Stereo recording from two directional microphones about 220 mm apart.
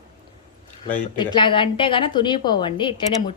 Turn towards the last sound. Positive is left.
turn(degrees=20)  # may be behind; listen again after turning